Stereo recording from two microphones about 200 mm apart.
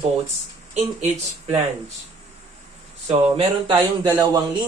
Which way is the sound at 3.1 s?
30° right (ahead or behind).